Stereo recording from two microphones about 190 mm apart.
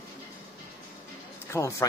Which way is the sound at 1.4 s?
15° left (ahead or behind).